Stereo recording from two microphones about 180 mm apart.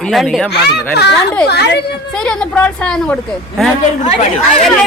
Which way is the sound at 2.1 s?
5° left (ahead or behind).